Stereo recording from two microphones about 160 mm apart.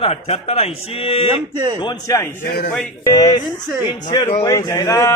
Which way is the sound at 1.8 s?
25° left (ahead or behind).